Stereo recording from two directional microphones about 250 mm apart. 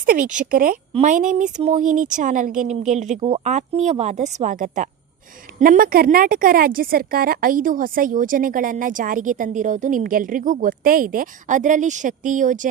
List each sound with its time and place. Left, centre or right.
0.0 s a woman's voice: right